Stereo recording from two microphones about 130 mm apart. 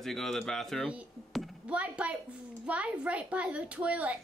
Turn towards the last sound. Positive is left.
turn(degrees=-10)  # may be behind; listen again after turning